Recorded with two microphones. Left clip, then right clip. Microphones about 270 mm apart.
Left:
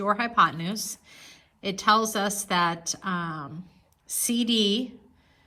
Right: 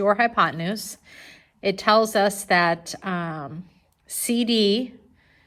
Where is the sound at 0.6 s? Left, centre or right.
Centre.